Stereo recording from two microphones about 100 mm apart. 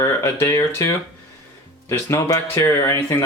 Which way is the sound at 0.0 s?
25° left (ahead or behind).